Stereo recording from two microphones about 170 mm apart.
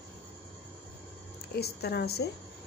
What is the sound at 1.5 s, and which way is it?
Speech, 70° left (ahead or behind).